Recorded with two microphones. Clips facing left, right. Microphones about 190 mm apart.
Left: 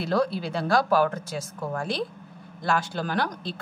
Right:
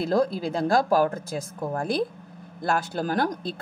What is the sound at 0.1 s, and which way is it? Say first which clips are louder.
Speech: even; 45° right (ahead or behind).